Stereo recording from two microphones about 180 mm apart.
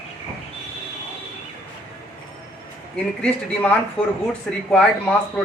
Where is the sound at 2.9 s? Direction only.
5° left (ahead or behind).